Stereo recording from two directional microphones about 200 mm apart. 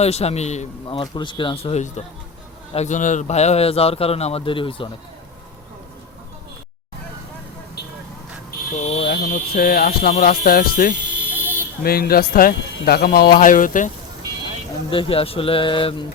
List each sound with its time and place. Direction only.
0.0 s a man's voice: 30° left (ahead or behind)
8.4 s a sound: 35° left (ahead or behind)
9.0 s speech: 50° left (ahead or behind)
11.2 s a sound: 10° right (ahead or behind)
11.8 s speech: 50° left (ahead or behind)
14.8 s speech: 25° left (ahead or behind)